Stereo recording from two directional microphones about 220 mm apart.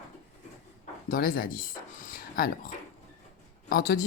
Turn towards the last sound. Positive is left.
turn(degrees=45)  # may be behind; listen again after turning